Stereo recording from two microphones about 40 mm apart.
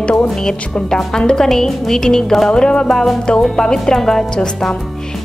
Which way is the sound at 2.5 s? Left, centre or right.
Left.